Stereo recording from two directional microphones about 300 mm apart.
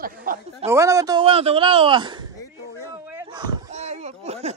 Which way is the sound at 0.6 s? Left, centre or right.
Centre.